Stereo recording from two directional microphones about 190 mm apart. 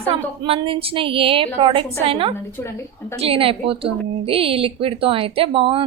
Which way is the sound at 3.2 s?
30° right (ahead or behind).